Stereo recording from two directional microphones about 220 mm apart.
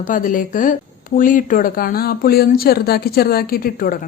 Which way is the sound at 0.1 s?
40° left (ahead or behind).